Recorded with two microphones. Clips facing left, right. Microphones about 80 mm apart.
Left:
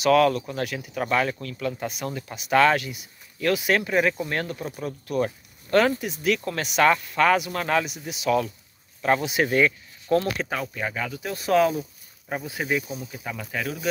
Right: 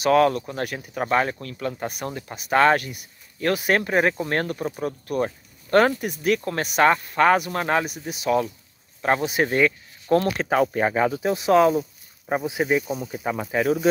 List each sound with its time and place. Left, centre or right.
0.0 s speech: right
9.0 s speech: right
11.3 s speech: centre
12.8 s speech: right